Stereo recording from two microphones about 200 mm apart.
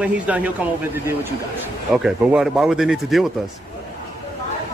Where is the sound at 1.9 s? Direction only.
5° right (ahead or behind).